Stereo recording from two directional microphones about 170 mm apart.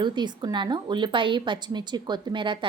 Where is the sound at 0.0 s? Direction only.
25° right (ahead or behind).